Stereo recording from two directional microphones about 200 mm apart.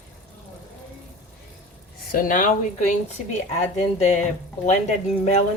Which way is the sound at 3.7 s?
35° left (ahead or behind).